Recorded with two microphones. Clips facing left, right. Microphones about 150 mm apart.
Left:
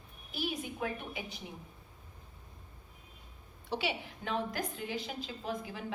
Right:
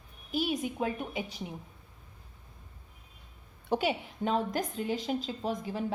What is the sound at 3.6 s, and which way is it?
Speech, 50° right (ahead or behind).